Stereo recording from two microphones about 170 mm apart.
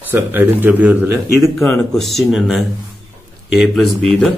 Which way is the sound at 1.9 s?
Centre (ahead or behind).